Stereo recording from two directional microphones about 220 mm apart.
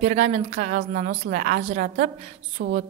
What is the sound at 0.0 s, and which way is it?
Speech, 35° right (ahead or behind).